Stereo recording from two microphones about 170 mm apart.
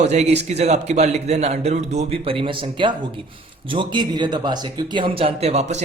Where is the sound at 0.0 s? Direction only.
40° right (ahead or behind).